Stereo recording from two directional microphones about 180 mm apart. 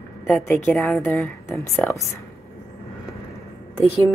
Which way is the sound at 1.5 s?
15° left (ahead or behind).